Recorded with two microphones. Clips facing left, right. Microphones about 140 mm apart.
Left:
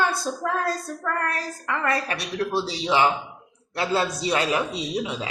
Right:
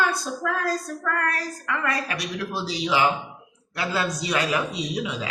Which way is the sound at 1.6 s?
30° left (ahead or behind).